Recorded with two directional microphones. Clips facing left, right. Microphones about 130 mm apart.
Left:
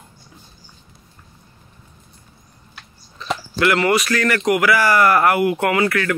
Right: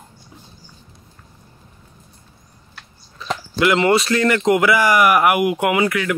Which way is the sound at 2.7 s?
Centre (ahead or behind).